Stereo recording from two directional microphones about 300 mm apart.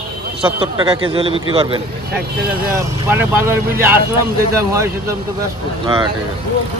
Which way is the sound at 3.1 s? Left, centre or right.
Centre.